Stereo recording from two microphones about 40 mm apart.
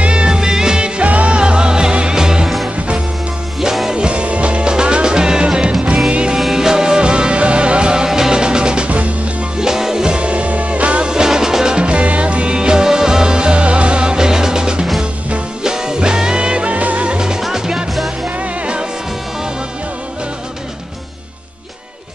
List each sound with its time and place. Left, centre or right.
0.0 s music: right
1.0 s music: right; by 2.5 s centre
3.9 s music: right
6.3 s music: centre
8.8 s music: right
9.6 s music: centre; by 11.1 s right
11.1 s music: centre
12.5 s music: centre
17.4 s music: centre
18.2 s music: right